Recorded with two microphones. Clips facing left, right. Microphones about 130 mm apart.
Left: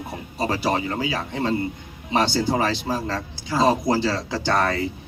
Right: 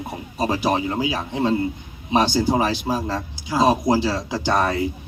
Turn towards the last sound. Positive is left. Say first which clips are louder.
# right 1 dB
turn(degrees=-15)  # may be behind; listen again after turning